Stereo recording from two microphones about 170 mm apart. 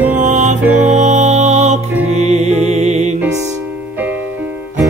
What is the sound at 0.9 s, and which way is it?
Music, 45° right (ahead or behind).